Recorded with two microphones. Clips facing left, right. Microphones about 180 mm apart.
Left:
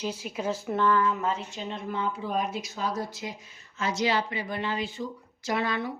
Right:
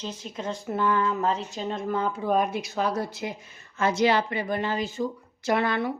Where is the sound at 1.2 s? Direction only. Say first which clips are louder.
Right 4 dB; 40° right (ahead or behind).